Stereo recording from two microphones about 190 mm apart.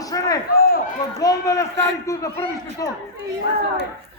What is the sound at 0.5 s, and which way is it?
Speech, 50° left (ahead or behind).